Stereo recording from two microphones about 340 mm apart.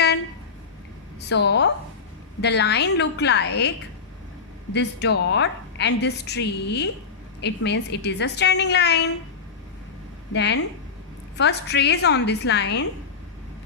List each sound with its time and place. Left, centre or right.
1.3 s a woman's voice: left
4.7 s a woman's voice: left
10.3 s a woman's voice: left